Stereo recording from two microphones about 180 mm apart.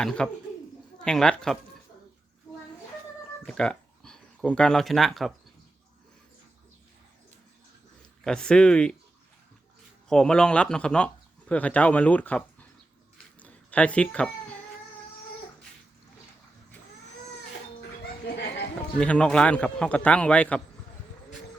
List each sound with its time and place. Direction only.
0.0 s speech: 5° left (ahead or behind)
3.4 s speech: 5° left (ahead or behind)
8.2 s speech: 5° left (ahead or behind)
10.1 s speech: 5° left (ahead or behind)
13.4 s a sound: 5° left (ahead or behind)
18.9 s speech: 5° left (ahead or behind)